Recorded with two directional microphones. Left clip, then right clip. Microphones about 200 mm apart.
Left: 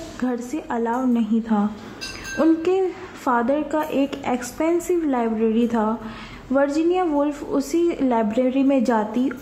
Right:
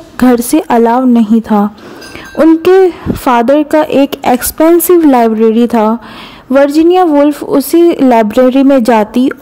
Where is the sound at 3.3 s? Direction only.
45° right (ahead or behind).